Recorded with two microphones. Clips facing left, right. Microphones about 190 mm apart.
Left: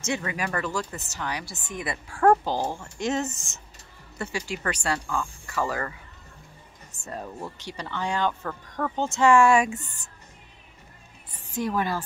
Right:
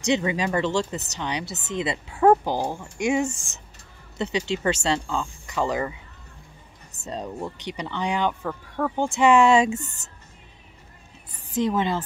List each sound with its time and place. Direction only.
0.0 s speech: 20° right (ahead or behind)
7.0 s speech: 20° right (ahead or behind)
11.5 s speech: 20° right (ahead or behind)